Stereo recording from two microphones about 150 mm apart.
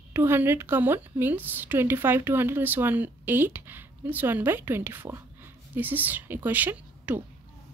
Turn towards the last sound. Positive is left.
turn(degrees=-10)  # may be behind; listen again after turning